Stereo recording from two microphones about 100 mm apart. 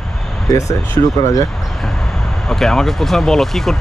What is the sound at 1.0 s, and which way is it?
Speech, 45° left (ahead or behind).